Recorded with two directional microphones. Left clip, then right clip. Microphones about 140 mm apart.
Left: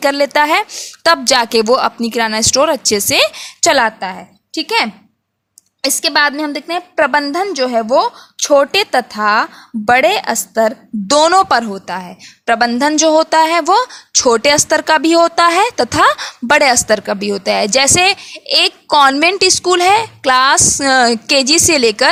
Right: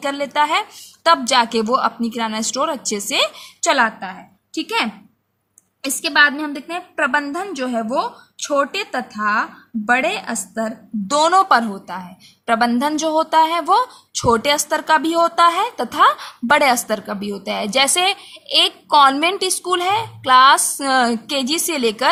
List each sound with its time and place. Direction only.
0.0 s a woman's voice: 50° left (ahead or behind)
3.7 s a woman's voice: 65° left (ahead or behind)
11.1 s a woman's voice: 45° left (ahead or behind)